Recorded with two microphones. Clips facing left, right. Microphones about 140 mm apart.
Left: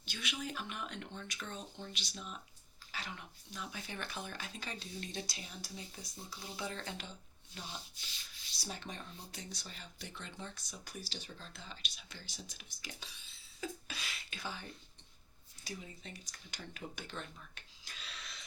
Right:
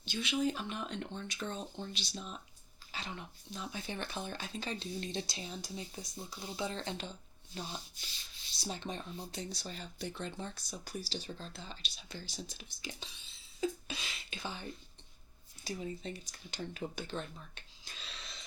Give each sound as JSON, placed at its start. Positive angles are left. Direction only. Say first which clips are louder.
{"t": 0.0, "sound": "speech", "louder": "right 9 dB", "side_deg": -25}